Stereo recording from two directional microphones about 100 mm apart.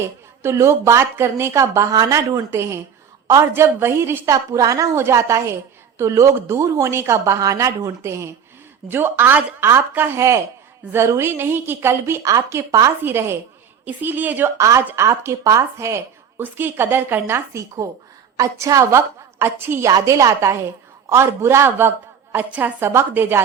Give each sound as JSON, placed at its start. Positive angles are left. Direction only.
{"t": 0.4, "sound": "a woman's voice", "side_deg": -25}
{"t": 14.6, "sound": "a woman's voice", "side_deg": -30}
{"t": 19.9, "sound": "a woman's voice", "side_deg": -35}